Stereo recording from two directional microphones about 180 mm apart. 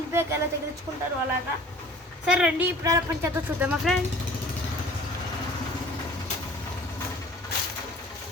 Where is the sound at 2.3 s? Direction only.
5° right (ahead or behind).